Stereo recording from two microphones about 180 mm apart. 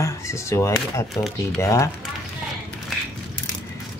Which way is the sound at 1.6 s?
15° left (ahead or behind).